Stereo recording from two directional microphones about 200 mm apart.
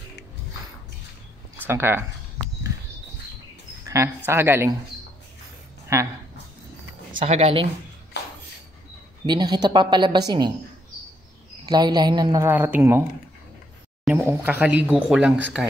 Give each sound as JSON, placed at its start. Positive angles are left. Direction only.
{"t": 1.6, "sound": "speech", "side_deg": -10}
{"t": 3.8, "sound": "speech", "side_deg": -15}
{"t": 5.9, "sound": "speech", "side_deg": -15}
{"t": 7.2, "sound": "speech", "side_deg": -30}
{"t": 8.2, "sound": "a sound", "side_deg": 55}
{"t": 9.2, "sound": "speech", "side_deg": -20}
{"t": 11.6, "sound": "speech", "side_deg": -20}
{"t": 14.0, "sound": "speech", "side_deg": -10}